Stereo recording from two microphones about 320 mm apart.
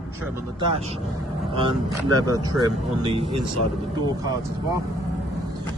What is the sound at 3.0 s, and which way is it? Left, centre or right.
Speech, centre.